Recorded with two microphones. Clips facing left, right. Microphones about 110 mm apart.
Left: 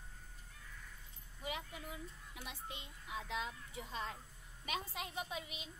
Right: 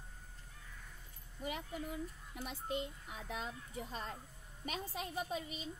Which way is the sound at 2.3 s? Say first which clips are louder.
Right 10 dB; 50° right (ahead or behind).